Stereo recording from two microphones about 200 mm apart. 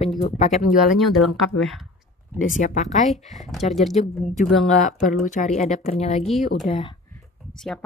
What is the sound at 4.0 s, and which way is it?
Speech, 35° left (ahead or behind).